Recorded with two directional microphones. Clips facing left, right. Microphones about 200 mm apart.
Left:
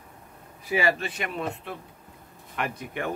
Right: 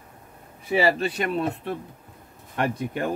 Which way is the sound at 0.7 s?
35° right (ahead or behind).